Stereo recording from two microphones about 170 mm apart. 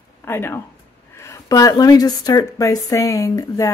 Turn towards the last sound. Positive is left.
turn(degrees=20)  # may be behind; listen again after turning